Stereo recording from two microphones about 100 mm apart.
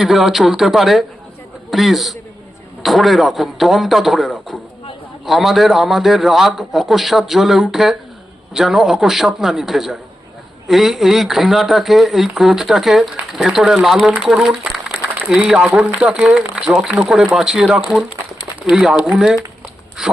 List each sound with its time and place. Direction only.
0.0 s a man's voice: centre (ahead or behind)